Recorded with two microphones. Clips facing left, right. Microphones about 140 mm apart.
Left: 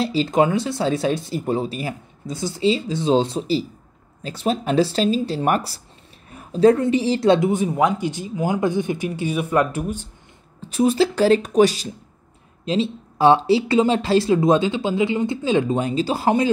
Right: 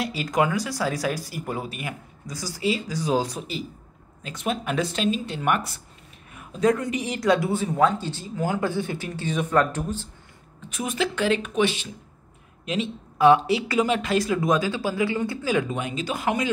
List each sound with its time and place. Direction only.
0.0 s speech: 30° left (ahead or behind); by 10.0 s 10° left (ahead or behind)
10.6 s speech: 30° left (ahead or behind)